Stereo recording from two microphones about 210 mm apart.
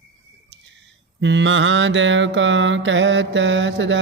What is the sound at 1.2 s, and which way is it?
Music, 55° right (ahead or behind).